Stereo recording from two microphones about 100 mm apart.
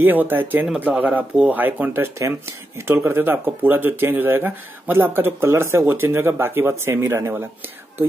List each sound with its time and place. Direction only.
0.0 s speech: 20° right (ahead or behind)